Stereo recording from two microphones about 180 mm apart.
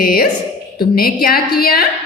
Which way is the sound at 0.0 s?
55° left (ahead or behind).